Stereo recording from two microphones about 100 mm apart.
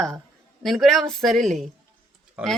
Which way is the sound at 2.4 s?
10° right (ahead or behind).